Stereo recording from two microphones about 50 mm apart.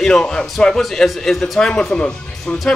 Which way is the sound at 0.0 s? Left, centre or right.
Centre.